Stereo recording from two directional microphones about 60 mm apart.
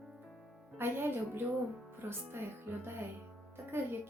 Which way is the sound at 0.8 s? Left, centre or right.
Right.